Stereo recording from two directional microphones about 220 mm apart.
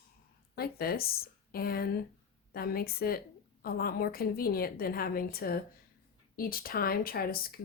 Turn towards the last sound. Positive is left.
turn(degrees=40)  # may be behind; listen again after turning